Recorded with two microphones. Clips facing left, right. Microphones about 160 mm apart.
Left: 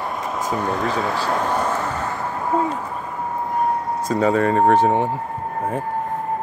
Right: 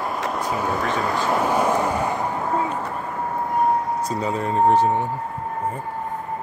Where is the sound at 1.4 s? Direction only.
10° right (ahead or behind).